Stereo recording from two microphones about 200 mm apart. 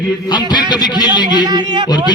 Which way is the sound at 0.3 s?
20° left (ahead or behind).